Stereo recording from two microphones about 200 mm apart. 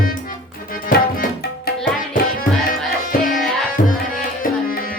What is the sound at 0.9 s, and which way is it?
Tabla, 45° left (ahead or behind).